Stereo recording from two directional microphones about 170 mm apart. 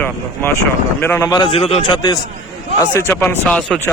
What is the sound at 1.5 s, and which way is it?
Speech, 35° left (ahead or behind).